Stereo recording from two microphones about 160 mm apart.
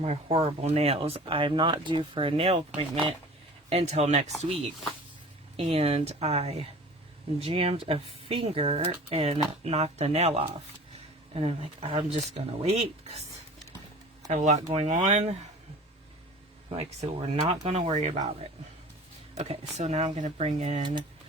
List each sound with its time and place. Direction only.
0.0 s speech: 40° right (ahead or behind)
14.3 s speech: 45° right (ahead or behind)
16.6 s speech: 40° right (ahead or behind)
19.3 s speech: 40° right (ahead or behind)